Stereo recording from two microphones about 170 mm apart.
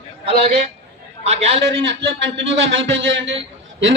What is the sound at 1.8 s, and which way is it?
A man's voice, 90° right.